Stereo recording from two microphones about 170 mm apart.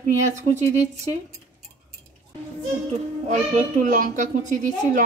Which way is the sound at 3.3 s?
45° right (ahead or behind).